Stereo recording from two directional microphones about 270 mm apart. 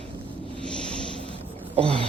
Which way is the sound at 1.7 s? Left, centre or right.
Centre.